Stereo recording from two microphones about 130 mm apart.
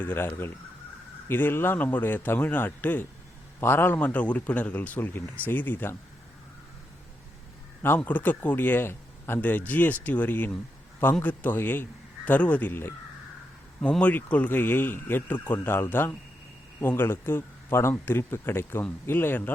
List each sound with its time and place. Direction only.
0.0 s a man's voice: 15° left (ahead or behind)
7.8 s a man's voice: 15° left (ahead or behind)